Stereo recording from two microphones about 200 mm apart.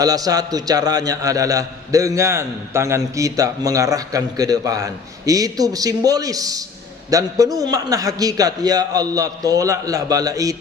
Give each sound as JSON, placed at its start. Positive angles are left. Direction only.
{"t": 0.0, "sound": "a man's voice", "side_deg": -20}